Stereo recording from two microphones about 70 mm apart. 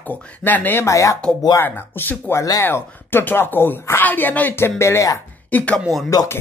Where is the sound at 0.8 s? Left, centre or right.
Left.